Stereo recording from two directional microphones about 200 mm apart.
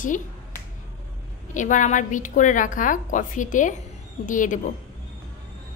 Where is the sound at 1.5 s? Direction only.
40° left (ahead or behind).